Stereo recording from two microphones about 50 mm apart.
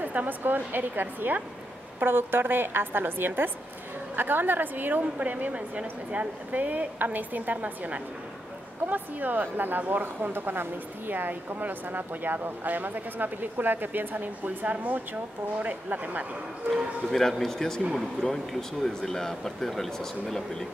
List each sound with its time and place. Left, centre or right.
0.0 s a woman's voice: right
17.1 s speech: centre